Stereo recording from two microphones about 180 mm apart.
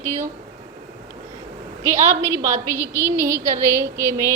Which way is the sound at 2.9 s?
15° right (ahead or behind).